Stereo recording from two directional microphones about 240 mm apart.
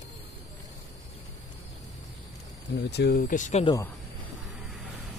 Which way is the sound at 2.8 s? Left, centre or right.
Left.